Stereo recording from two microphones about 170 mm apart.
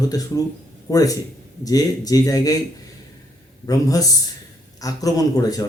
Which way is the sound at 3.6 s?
20° left (ahead or behind).